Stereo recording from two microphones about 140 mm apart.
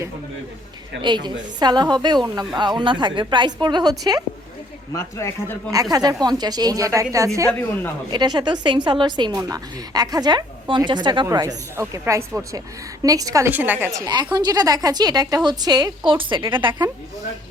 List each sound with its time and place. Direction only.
1.0 s a woman's voice: 30° right (ahead or behind)
4.9 s speech: 20° left (ahead or behind)
5.7 s a woman's voice: 25° right (ahead or behind)
13.5 s a woman's voice: 15° right (ahead or behind)
14.3 s a woman's voice: 30° right (ahead or behind)